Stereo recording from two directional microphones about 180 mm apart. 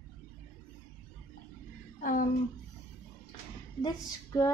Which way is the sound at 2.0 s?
45° left (ahead or behind).